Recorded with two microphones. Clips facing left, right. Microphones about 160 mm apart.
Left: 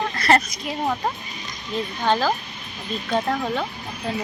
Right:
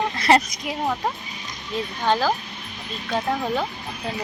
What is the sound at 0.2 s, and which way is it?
Speech, 20° right (ahead or behind).